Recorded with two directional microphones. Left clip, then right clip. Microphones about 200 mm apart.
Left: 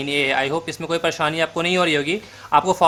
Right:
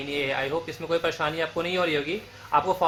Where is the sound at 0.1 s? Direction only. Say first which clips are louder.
Left 7 dB; 35° left (ahead or behind).